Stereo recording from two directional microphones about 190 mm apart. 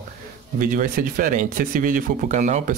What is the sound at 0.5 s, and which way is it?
Speech, 45° right (ahead or behind).